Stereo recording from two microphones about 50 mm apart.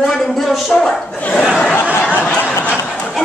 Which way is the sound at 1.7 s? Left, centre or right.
Left.